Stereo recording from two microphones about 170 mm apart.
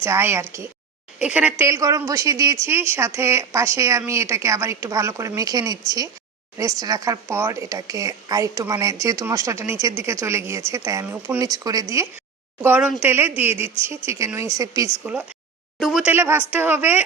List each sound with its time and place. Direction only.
0.0 s a woman's voice: 15° right (ahead or behind)
11.3 s speech: 20° right (ahead or behind)
12.6 s a woman's voice: 10° right (ahead or behind)
15.0 s speech: 5° right (ahead or behind)
16.1 s a woman's voice: 15° right (ahead or behind)